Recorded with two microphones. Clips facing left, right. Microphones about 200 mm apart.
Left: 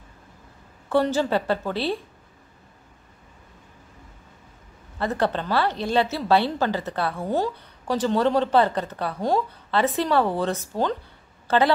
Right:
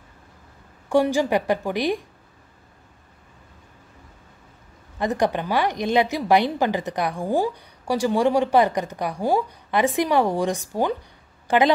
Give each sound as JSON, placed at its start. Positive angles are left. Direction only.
{"t": 0.8, "sound": "a woman's voice", "side_deg": -15}
{"t": 4.9, "sound": "a woman's voice", "side_deg": -15}